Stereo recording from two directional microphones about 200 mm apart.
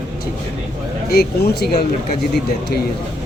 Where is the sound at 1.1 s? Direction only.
50° left (ahead or behind).